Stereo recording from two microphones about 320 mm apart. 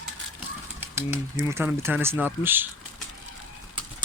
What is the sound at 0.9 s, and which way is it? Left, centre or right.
Speech, centre.